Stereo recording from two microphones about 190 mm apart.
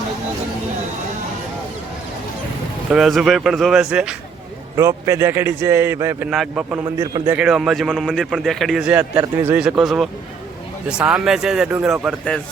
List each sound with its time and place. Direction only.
2.9 s a man's voice: centre (ahead or behind)
4.8 s speech: 15° right (ahead or behind)
6.3 s a man's voice: centre (ahead or behind)
6.7 s speech: 20° right (ahead or behind)
7.3 s a man's voice: 5° right (ahead or behind)